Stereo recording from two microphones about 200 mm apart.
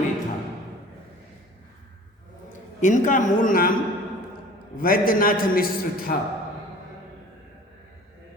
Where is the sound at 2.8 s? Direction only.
40° left (ahead or behind).